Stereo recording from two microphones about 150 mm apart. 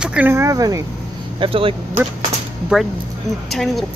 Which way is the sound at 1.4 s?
35° right (ahead or behind).